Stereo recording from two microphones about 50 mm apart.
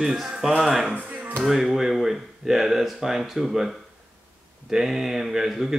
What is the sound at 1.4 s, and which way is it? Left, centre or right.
Speech, centre.